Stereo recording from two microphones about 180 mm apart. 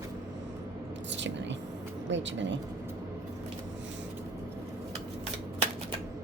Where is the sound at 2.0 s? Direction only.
90° right.